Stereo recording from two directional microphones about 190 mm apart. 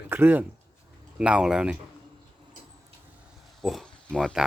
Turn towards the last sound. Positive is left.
turn(degrees=5)  # may be behind; listen again after turning